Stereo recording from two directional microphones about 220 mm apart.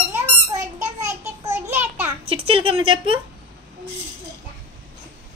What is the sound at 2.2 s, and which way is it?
Speech, 25° right (ahead or behind).